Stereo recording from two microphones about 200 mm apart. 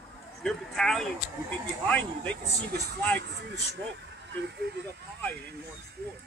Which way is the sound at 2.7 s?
55° right (ahead or behind).